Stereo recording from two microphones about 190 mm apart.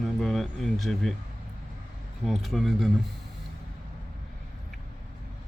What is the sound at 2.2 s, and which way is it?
Speech, centre (ahead or behind).